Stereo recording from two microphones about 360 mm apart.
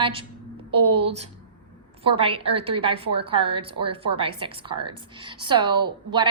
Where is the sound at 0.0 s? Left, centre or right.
Centre.